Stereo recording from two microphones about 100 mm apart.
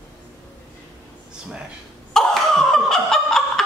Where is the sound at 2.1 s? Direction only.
5° left (ahead or behind).